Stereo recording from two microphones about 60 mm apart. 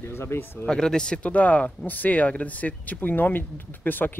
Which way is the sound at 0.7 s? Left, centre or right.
Centre.